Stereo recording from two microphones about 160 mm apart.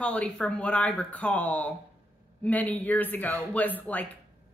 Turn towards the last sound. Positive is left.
turn(degrees=10)  # may be behind; listen again after turning